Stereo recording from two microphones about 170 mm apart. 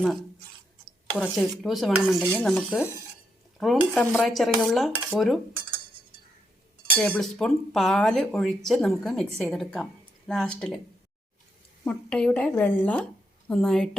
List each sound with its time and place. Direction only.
1.2 s speech: centre (ahead or behind)
7.2 s speech: centre (ahead or behind)
11.9 s a woman's voice: 5° left (ahead or behind)